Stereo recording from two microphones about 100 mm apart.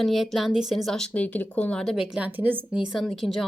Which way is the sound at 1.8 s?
5° right (ahead or behind).